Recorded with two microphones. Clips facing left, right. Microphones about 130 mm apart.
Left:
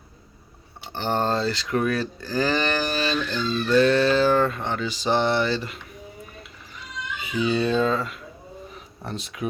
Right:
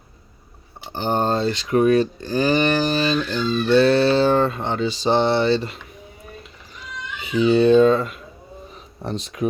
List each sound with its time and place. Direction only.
0.9 s speech: 20° right (ahead or behind)
3.7 s speech: 30° right (ahead or behind)
7.3 s speech: 30° right (ahead or behind)